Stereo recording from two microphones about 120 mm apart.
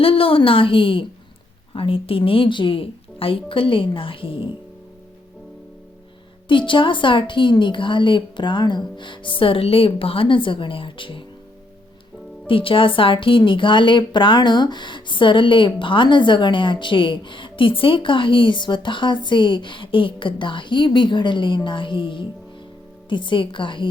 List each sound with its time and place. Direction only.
0.0 s a woman's voice: 50° left (ahead or behind)
6.5 s a woman's voice: 45° left (ahead or behind)
12.5 s a woman's voice: 50° left (ahead or behind)